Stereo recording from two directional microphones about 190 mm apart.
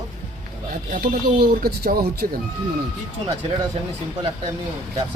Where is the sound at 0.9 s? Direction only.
50° right (ahead or behind).